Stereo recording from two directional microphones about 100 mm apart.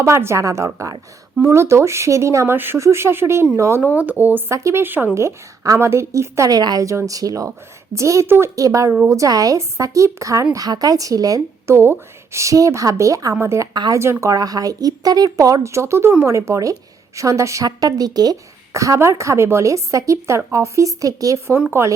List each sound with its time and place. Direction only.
0.0 s speech: 25° right (ahead or behind)
17.7 s speech: 40° right (ahead or behind)